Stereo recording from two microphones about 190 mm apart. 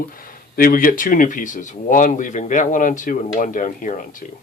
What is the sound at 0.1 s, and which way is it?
Speech, 50° left (ahead or behind).